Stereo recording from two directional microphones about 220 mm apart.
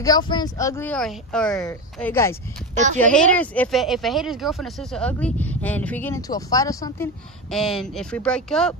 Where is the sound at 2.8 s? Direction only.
35° right (ahead or behind).